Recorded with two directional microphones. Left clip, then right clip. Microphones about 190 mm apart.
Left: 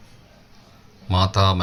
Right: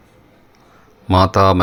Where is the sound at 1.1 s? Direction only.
45° right (ahead or behind).